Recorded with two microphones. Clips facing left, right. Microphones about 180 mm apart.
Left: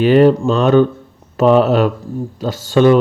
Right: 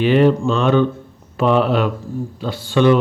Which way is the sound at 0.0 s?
40° left (ahead or behind).